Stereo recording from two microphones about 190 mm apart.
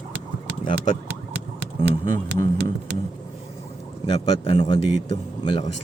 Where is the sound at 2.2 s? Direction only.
65° right (ahead or behind).